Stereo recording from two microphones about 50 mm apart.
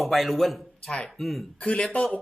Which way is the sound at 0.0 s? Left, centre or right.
Centre.